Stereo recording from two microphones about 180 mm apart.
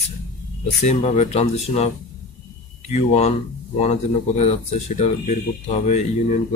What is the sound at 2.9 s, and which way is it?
Speech, 40° left (ahead or behind).